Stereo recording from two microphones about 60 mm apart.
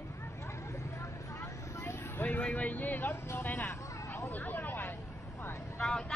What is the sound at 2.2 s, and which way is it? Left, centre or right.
Speech, left.